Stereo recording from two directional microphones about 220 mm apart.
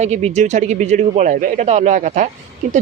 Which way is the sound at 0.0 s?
30° right (ahead or behind).